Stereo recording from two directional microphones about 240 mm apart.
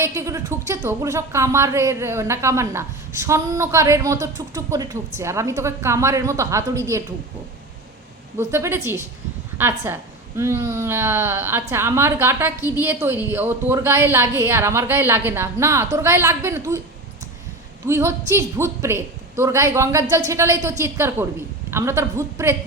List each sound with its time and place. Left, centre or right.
0.0 s a woman's voice: centre
8.4 s a woman's voice: centre
17.8 s a woman's voice: centre